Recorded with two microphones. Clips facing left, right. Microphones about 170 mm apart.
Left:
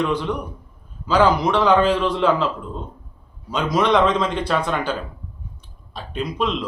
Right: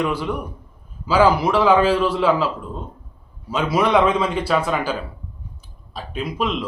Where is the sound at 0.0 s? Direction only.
10° right (ahead or behind).